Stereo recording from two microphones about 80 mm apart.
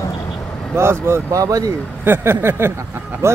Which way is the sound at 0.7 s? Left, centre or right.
Right.